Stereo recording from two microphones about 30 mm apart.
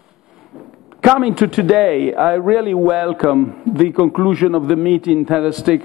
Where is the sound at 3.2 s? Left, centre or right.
Centre.